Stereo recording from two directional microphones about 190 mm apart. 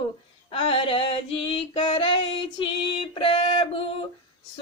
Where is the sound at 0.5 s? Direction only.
30° left (ahead or behind).